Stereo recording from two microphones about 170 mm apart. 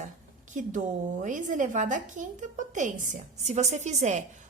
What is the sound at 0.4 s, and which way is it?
A woman's voice, 50° right (ahead or behind).